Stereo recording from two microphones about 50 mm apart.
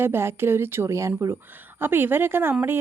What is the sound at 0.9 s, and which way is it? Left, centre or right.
Speech, right.